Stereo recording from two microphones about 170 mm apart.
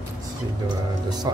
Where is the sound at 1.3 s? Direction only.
20° right (ahead or behind).